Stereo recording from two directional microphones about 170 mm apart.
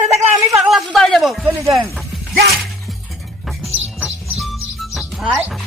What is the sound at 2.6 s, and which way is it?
Music, centre (ahead or behind).